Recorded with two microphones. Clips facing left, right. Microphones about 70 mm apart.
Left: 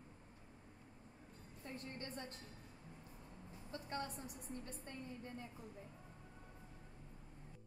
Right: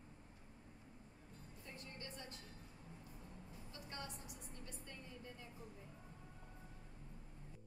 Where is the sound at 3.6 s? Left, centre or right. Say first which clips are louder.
Left 7 dB; left.